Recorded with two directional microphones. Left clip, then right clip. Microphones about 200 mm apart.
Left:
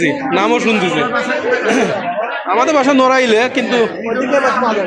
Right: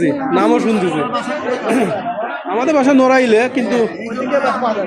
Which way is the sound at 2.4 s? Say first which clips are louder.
Left 2 dB; 25° right (ahead or behind).